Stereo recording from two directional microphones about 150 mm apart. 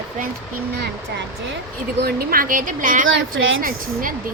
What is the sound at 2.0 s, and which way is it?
Speech, 85° right.